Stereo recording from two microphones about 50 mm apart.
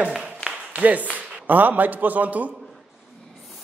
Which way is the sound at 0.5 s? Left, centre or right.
Right.